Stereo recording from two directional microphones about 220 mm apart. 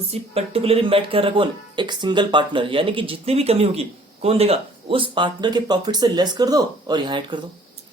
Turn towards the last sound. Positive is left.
turn(degrees=-20)  # may be behind; listen again after turning